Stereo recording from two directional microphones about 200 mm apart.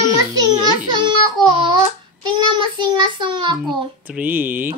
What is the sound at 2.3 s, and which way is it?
A child's voice, 20° right (ahead or behind).